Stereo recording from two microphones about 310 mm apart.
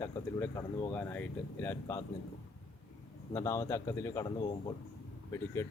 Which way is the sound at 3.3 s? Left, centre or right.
Centre.